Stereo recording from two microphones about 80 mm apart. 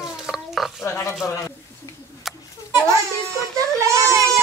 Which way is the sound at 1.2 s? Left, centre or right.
Left.